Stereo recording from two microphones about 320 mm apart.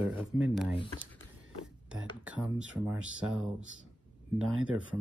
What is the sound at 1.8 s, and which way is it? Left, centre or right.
Speech, centre.